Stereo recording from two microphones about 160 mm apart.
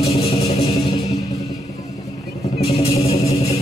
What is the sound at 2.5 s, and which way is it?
Music, 40° left (ahead or behind).